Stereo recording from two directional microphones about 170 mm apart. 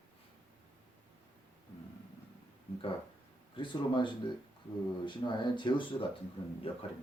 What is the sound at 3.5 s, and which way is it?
A man's voice, 30° left (ahead or behind).